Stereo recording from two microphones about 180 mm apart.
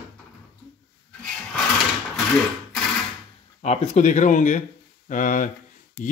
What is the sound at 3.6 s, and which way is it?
Speech, 40° left (ahead or behind).